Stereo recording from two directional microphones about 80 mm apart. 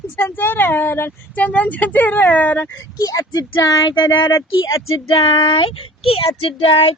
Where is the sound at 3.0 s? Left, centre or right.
Left.